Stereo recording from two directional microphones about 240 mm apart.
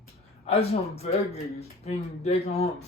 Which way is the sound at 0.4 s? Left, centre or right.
Left.